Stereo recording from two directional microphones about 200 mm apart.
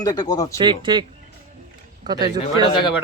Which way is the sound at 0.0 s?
20° left (ahead or behind).